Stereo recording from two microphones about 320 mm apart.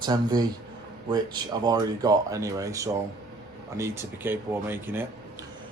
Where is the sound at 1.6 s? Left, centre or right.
Centre.